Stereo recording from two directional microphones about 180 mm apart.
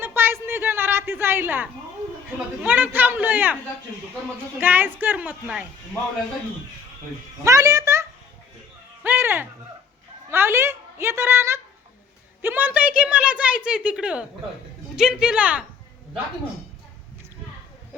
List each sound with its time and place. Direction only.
0.0 s a sound: 10° right (ahead or behind)
2.6 s a woman's voice: 10° right (ahead or behind)
4.6 s a woman's voice: 10° right (ahead or behind)
7.4 s a woman's voice: 15° right (ahead or behind)
9.0 s a sound: 15° right (ahead or behind)
10.3 s a woman's voice: 10° right (ahead or behind)